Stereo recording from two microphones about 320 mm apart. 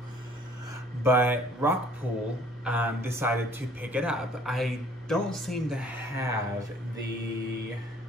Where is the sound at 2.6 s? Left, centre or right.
Centre.